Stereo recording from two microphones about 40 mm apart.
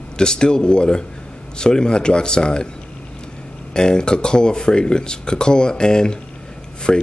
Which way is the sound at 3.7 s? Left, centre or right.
Centre.